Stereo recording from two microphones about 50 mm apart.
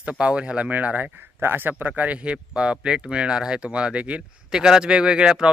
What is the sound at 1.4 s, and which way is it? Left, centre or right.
Speech, right.